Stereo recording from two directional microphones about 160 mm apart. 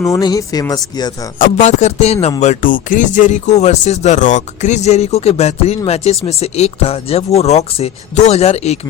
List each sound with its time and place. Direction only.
0.1 s speech: 25° left (ahead or behind)
1.4 s speech: 45° left (ahead or behind)